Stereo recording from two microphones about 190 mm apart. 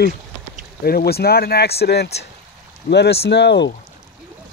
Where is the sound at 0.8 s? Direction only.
55° left (ahead or behind).